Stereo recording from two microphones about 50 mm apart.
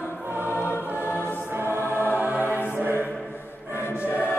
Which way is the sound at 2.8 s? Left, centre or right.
Right.